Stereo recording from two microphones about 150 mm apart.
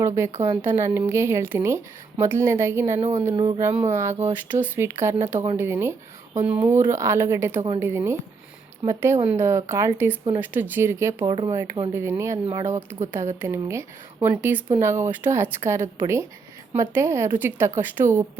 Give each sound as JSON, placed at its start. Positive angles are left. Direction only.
{"t": 0.4, "sound": "a woman's voice", "side_deg": -15}